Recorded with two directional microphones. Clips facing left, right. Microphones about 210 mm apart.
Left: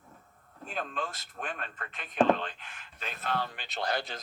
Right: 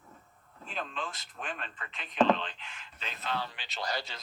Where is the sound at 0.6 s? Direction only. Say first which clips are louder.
Left 3 dB; 45° left (ahead or behind).